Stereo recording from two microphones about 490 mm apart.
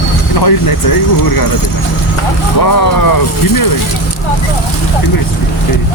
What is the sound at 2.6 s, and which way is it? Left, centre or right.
Speech, left.